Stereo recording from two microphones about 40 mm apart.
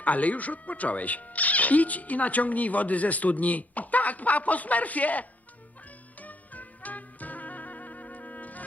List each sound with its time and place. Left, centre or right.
0.0 s speech: left
6.2 s music: left